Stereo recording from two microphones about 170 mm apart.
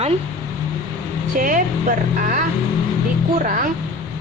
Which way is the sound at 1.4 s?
55° right (ahead or behind).